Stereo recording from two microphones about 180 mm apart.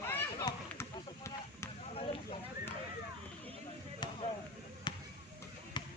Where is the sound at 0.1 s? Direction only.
15° left (ahead or behind).